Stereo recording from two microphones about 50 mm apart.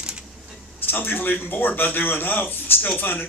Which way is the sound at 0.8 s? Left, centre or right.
Left.